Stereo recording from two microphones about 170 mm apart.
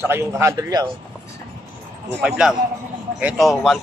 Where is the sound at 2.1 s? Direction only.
5° right (ahead or behind).